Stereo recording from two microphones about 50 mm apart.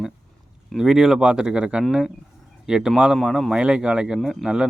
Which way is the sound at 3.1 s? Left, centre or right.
Centre.